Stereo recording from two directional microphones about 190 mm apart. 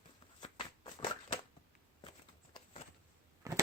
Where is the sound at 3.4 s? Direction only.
15° right (ahead or behind).